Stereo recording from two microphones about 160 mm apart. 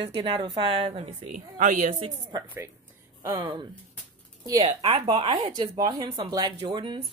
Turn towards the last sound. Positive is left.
turn(degrees=-35)  # may be behind; listen again after turning